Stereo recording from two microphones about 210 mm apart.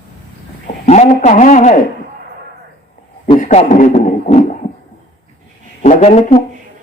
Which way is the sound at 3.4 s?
35° left (ahead or behind).